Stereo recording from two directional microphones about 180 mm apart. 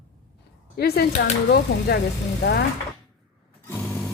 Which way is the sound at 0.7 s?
55° left (ahead or behind).